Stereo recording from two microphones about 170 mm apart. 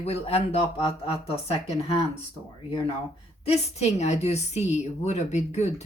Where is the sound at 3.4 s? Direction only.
40° left (ahead or behind).